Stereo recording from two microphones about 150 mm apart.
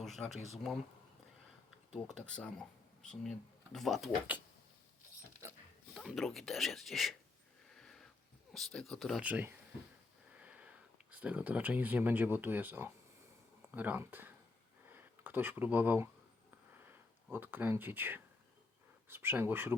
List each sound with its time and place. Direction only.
0.0 s speech: centre (ahead or behind)
1.9 s speech: 5° left (ahead or behind)
5.4 s dog: 20° right (ahead or behind)
5.9 s speech: 5° right (ahead or behind)
7.7 s a sound: 5° left (ahead or behind)
8.5 s speech: 5° left (ahead or behind)
9.2 s speech: 15° right (ahead or behind)
14.8 s a sound: 15° right (ahead or behind)
16.7 s sniff: 15° right (ahead or behind)
17.3 s speech: 15° right (ahead or behind)